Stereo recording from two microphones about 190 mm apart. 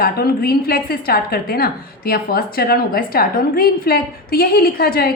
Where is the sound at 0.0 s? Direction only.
55° left (ahead or behind).